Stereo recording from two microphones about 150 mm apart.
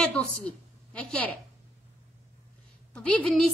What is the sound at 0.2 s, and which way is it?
A woman's voice, 10° left (ahead or behind).